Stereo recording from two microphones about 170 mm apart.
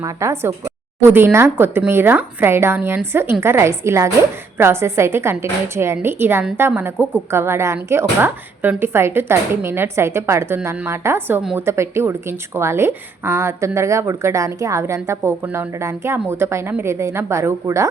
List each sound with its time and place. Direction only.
0.0 s a woman's voice: 15° right (ahead or behind)